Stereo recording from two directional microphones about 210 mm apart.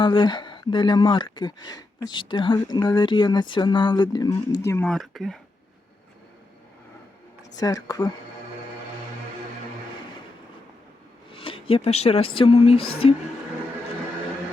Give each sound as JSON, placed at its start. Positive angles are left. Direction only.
{"t": 0.0, "sound": "speech", "side_deg": 20}
{"t": 4.9, "sound": "speech", "side_deg": 0}
{"t": 7.9, "sound": "speech", "side_deg": 20}
{"t": 11.3, "sound": "speech", "side_deg": 25}